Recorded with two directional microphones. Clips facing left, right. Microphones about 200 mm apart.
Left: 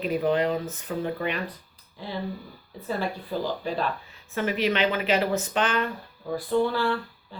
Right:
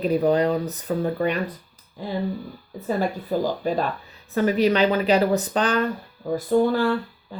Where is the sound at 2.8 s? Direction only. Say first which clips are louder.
Right 5 dB; 45° right (ahead or behind).